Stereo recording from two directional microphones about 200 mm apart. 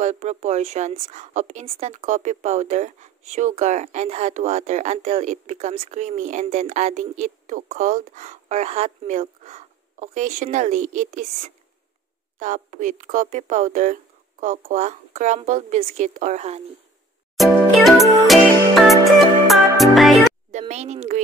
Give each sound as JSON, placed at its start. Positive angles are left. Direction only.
{"t": 0.0, "sound": "speech", "side_deg": -35}
{"t": 17.4, "sound": "music", "side_deg": 0}
{"t": 20.5, "sound": "speech", "side_deg": -35}